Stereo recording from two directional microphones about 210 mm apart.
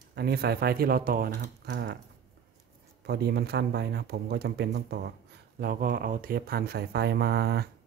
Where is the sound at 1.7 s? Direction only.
55° right (ahead or behind).